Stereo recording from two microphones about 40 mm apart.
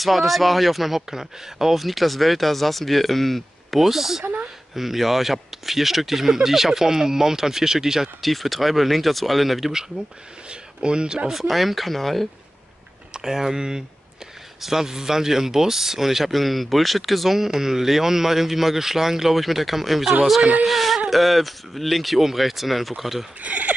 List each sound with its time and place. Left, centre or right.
0.0 s speech: centre
8.2 s speech: centre
10.5 s a sound: right
11.2 s speech: centre
13.2 s speech: centre
23.4 s speech: right